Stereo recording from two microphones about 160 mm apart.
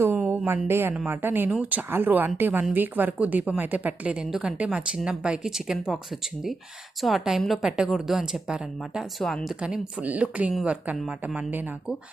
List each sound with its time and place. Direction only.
0.0 s a sound: 15° right (ahead or behind)
0.9 s speech: 10° right (ahead or behind)
7.0 s a woman's voice: centre (ahead or behind)